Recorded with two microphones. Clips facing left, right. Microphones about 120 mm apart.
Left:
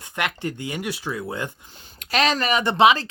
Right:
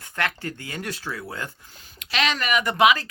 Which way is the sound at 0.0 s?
20° left (ahead or behind).